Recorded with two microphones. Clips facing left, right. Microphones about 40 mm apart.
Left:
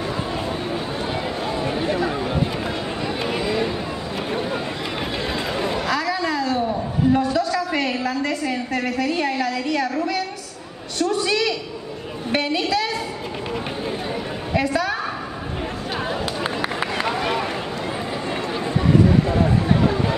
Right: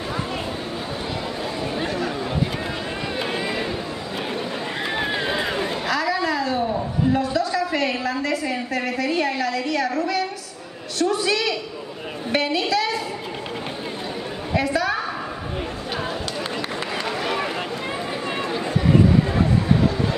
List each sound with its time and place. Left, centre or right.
3.3 s run: centre
4.9 s run: centre
5.9 s a sound: centre
7.7 s a woman's voice: centre
14.5 s a woman's voice: centre